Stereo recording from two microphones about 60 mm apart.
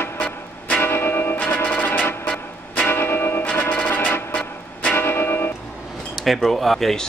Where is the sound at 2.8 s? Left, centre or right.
Left; by 4.9 s centre.